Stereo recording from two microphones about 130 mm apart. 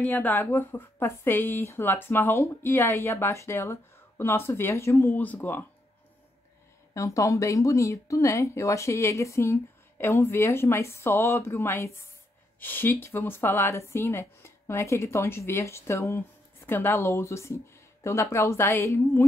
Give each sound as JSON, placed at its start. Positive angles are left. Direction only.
{"t": 0.0, "sound": "speech", "side_deg": 10}
{"t": 6.9, "sound": "speech", "side_deg": 25}